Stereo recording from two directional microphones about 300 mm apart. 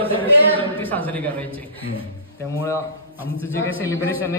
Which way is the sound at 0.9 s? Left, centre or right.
Centre.